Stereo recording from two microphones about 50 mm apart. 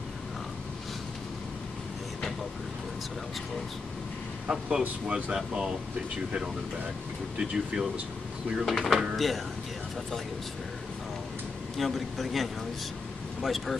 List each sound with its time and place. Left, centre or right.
4.5 s speech: centre
7.3 s speech: centre
8.6 s speech: centre
11.7 s speech: centre